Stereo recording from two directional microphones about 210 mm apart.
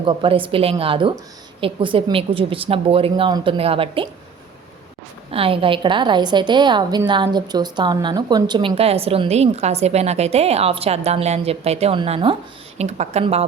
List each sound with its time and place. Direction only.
0.0 s a woman's voice: 25° right (ahead or behind)
5.3 s a woman's voice: 25° right (ahead or behind)